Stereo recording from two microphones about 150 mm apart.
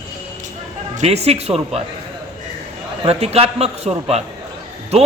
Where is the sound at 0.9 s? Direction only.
45° right (ahead or behind).